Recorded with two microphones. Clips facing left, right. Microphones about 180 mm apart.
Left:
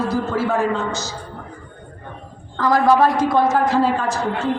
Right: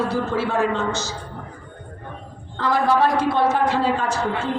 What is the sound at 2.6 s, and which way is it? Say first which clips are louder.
A man's voice: left 4 dB; 40° left (ahead or behind).